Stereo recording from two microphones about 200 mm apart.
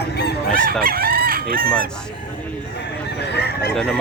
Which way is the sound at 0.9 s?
45° right (ahead or behind).